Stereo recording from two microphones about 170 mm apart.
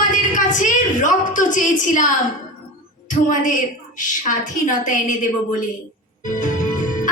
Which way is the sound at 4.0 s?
50° left (ahead or behind).